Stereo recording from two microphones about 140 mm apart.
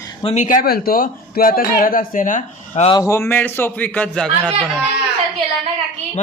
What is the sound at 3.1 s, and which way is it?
A man's voice, 15° left (ahead or behind).